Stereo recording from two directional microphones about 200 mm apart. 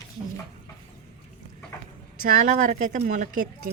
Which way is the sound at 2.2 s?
40° right (ahead or behind).